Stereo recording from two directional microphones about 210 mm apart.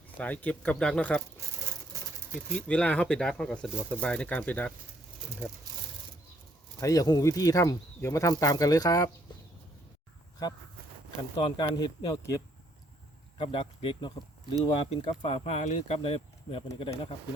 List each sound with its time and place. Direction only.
0.2 s speech: 5° left (ahead or behind)
2.6 s speech: 5° left (ahead or behind)
6.7 s speech: 15° left (ahead or behind)
10.4 s speech: 15° left (ahead or behind)
13.4 s speech: 25° left (ahead or behind)